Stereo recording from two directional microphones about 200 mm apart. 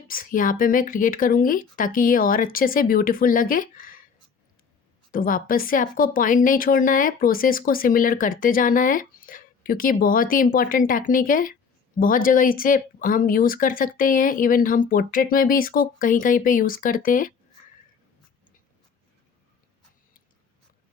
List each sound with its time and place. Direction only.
0.1 s a woman's voice: 45° left (ahead or behind)
5.1 s a woman's voice: 45° left (ahead or behind)